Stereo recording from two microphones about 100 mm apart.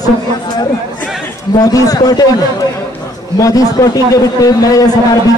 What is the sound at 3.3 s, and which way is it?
A man's voice, 35° left (ahead or behind).